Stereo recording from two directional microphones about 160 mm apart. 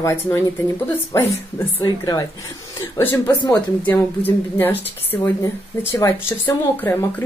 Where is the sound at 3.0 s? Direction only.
15° left (ahead or behind).